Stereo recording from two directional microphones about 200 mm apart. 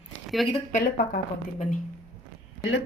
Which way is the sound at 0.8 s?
45° left (ahead or behind).